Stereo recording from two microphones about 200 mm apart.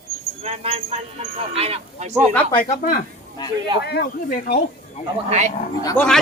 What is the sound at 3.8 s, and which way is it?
Speech, 55° left (ahead or behind).